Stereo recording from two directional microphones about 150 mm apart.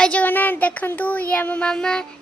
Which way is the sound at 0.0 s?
10° left (ahead or behind).